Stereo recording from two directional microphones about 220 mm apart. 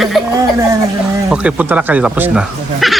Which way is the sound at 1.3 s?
5° right (ahead or behind).